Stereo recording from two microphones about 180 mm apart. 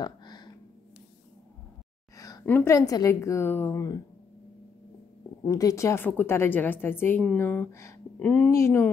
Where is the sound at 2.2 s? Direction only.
15° left (ahead or behind).